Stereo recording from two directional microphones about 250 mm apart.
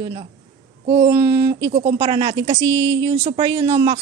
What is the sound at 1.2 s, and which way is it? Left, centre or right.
A woman's voice, right.